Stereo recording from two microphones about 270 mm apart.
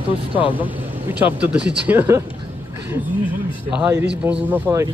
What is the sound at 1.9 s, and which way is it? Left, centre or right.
Speech, centre.